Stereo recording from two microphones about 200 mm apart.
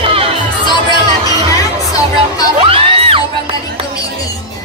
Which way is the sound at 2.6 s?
25° right (ahead or behind).